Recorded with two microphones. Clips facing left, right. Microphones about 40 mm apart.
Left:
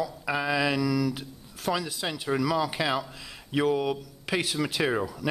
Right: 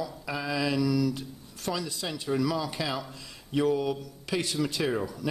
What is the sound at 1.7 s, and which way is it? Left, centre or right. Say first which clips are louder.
Speech: left 3 dB; left.